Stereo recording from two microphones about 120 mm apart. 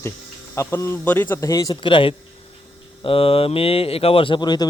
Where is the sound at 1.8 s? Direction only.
45° left (ahead or behind).